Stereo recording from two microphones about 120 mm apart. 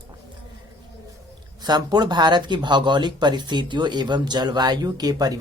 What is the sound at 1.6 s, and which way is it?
Speech, 35° right (ahead or behind).